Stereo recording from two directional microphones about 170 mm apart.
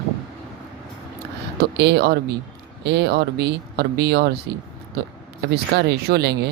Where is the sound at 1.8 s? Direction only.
75° right (ahead or behind).